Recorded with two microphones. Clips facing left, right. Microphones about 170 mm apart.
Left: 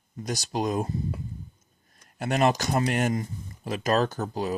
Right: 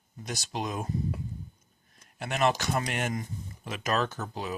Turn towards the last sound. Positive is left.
turn(degrees=40)  # may be behind; listen again after turning